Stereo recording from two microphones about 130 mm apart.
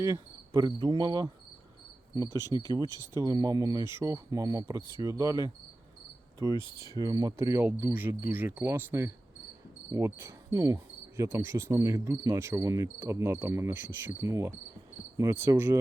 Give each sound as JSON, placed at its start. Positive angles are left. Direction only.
{"t": 0.0, "sound": "cricket", "side_deg": -25}
{"t": 2.5, "sound": "cricket", "side_deg": -40}
{"t": 3.0, "sound": "cricket", "side_deg": -25}
{"t": 6.7, "sound": "cricket", "side_deg": -20}